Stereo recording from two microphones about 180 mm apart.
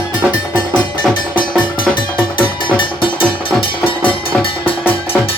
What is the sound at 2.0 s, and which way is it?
Music, 25° left (ahead or behind).